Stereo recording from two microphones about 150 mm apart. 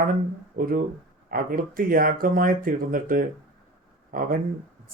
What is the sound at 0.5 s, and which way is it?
Speech, 70° right (ahead or behind).